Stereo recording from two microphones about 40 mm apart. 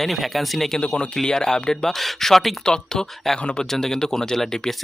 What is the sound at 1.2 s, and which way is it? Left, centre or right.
Speech, centre.